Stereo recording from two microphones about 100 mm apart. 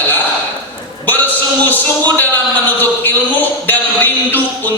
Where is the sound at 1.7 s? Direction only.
20° left (ahead or behind).